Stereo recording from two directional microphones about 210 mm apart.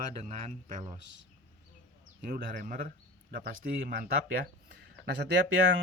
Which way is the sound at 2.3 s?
45° right (ahead or behind).